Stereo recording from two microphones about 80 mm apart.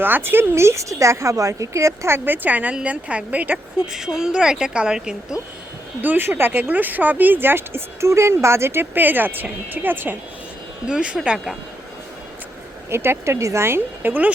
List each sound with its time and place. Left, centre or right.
0.0 s a woman's voice: right
3.9 s a woman's voice: centre
6.0 s speech: right
10.8 s a woman's voice: centre
12.9 s a woman's voice: right